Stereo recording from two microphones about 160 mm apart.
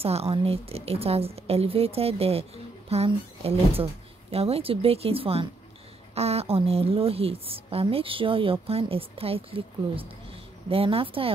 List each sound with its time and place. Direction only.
0.0 s speech: 40° right (ahead or behind)